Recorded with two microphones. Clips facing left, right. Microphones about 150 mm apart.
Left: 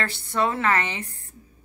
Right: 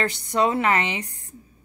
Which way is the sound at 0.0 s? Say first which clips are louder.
Right 3 dB; 15° right (ahead or behind).